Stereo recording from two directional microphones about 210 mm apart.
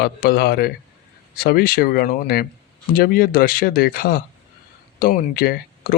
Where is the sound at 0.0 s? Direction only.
45° left (ahead or behind).